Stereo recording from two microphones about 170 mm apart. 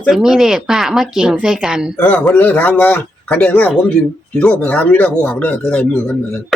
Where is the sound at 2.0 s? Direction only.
10° left (ahead or behind).